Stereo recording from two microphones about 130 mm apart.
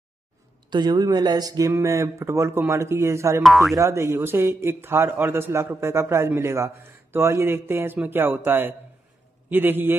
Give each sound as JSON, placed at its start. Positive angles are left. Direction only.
{"t": 0.7, "sound": "a man's voice", "side_deg": -35}
{"t": 3.4, "sound": "speech", "side_deg": 0}
{"t": 3.7, "sound": "a man's voice", "side_deg": -25}